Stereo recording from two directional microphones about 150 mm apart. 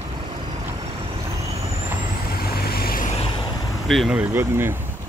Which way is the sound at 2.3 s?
90° left.